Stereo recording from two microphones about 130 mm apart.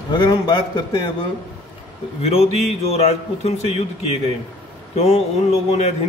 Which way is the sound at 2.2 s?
55° left (ahead or behind).